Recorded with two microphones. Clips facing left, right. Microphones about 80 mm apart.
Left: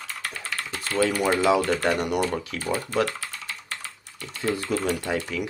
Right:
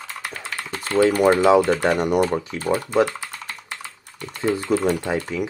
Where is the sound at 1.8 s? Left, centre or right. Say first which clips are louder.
Right 5 dB; right.